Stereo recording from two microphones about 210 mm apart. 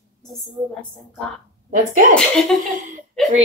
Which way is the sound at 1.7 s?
40° right (ahead or behind).